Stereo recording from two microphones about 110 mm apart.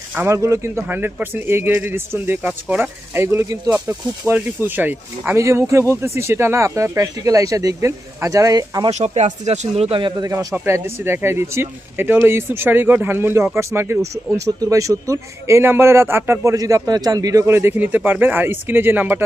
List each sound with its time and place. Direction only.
0.2 s a man's voice: 25° right (ahead or behind)
3.3 s a man's voice: 25° right (ahead or behind)
8.9 s speech: 90° right; by 10.0 s 65° right (ahead or behind)
10.0 s speech: 35° right (ahead or behind)
10.8 s a man's voice: 20° right (ahead or behind)